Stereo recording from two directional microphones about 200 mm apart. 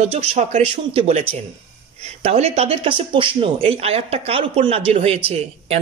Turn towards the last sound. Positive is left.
turn(degrees=-30)  # may be behind; listen again after turning